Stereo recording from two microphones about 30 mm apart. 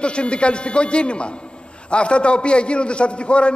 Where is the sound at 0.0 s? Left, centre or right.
Left.